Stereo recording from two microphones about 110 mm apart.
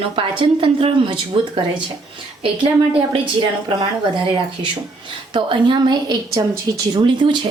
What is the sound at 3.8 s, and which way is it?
A woman's voice, 50° right (ahead or behind).